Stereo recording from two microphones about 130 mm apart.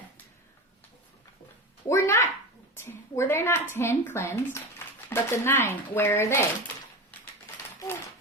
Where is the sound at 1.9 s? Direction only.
20° left (ahead or behind).